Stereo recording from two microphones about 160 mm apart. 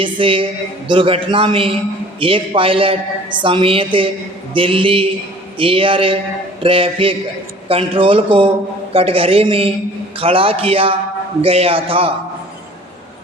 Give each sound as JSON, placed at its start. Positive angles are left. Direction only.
{"t": 0.0, "sound": "a woman's voice", "side_deg": -35}